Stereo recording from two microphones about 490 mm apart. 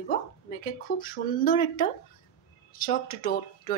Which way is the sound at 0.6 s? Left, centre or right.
Centre.